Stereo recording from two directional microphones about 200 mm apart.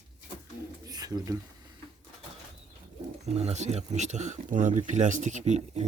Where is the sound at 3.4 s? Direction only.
35° right (ahead or behind).